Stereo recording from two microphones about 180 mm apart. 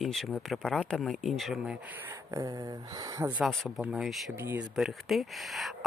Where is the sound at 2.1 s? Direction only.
15° right (ahead or behind).